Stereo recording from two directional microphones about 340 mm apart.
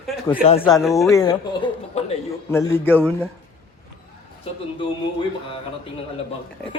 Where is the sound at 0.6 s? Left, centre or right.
Centre.